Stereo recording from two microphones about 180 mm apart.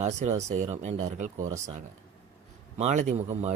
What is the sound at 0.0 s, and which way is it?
A man's voice, 40° right (ahead or behind).